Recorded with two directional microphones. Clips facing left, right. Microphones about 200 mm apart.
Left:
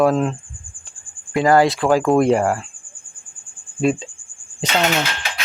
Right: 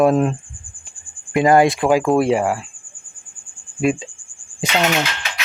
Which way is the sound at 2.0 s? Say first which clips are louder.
Left 1 dB; 5° right (ahead or behind).